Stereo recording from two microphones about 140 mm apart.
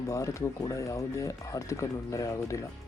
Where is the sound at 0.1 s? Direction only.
20° left (ahead or behind).